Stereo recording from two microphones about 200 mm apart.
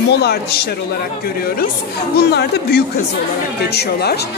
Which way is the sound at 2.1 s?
55° left (ahead or behind).